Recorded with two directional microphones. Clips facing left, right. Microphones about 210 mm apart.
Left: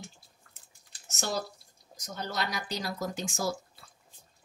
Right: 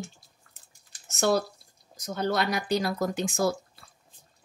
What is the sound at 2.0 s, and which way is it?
Speech, 60° right (ahead or behind).